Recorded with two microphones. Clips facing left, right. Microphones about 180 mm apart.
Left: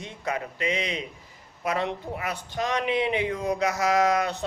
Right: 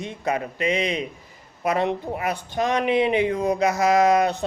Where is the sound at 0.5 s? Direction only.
55° right (ahead or behind).